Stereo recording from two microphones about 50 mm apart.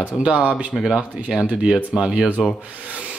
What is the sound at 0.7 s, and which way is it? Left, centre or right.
Speech, centre.